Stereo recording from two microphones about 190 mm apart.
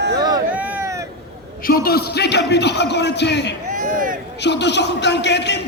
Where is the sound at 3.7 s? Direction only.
45° right (ahead or behind).